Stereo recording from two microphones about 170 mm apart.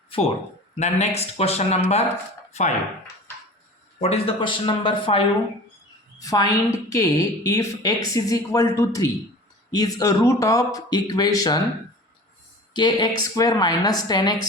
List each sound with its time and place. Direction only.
0.1 s speech: 30° left (ahead or behind)
4.0 s a woman's voice: 35° left (ahead or behind)
12.7 s a woman's voice: 25° left (ahead or behind)